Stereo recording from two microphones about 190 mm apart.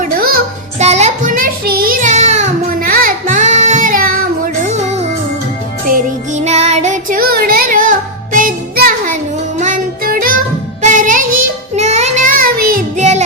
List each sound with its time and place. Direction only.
0.0 s music: 50° right (ahead or behind)
0.8 s child singing: 35° right (ahead or behind)
4.6 s music: 35° right (ahead or behind)
11.8 s child singing: 35° right (ahead or behind)